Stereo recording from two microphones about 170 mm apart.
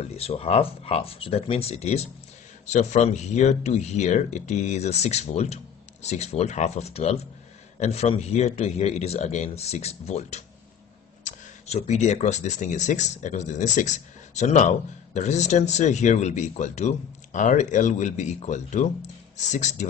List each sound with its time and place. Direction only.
0.1 s speech: 35° left (ahead or behind)